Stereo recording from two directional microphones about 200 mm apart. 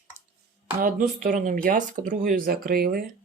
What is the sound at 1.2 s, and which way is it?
Speech, 40° right (ahead or behind).